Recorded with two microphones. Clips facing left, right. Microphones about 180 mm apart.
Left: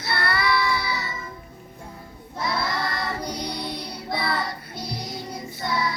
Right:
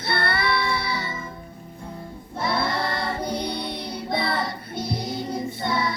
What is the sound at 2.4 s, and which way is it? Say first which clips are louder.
Child singing: right 2 dB; 30° right (ahead or behind).